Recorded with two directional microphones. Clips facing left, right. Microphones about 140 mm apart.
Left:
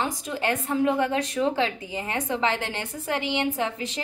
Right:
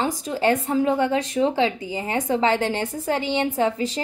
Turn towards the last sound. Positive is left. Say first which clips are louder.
# right 6 dB
turn(degrees=-35)  # may be behind; listen again after turning